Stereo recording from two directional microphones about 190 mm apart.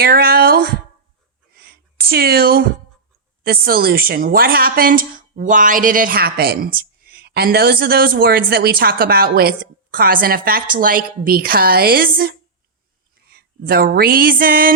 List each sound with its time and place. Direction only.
0.0 s speech: 55° right (ahead or behind)
1.5 s a sound: 55° right (ahead or behind)
3.4 s a woman's voice: 50° right (ahead or behind)